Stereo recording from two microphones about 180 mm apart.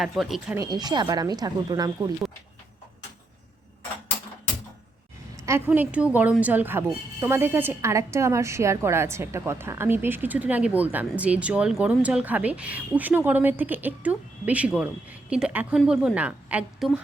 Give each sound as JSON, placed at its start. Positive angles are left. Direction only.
{"t": 0.0, "sound": "speech", "side_deg": 0}
{"t": 0.5, "sound": "speech", "side_deg": -20}
{"t": 5.4, "sound": "a woman's voice", "side_deg": -15}